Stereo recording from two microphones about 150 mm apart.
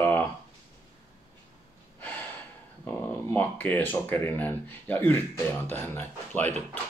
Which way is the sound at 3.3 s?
10° left (ahead or behind).